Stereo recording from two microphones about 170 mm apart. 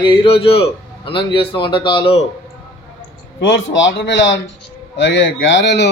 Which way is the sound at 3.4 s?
90° left.